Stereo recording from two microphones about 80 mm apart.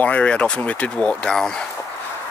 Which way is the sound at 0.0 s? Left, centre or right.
Centre.